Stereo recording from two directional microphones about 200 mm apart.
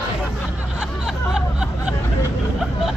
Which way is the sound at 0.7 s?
5° right (ahead or behind).